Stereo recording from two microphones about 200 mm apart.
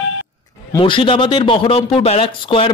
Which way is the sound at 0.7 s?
25° left (ahead or behind).